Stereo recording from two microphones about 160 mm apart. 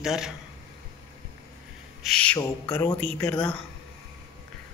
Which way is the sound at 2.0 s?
5° left (ahead or behind).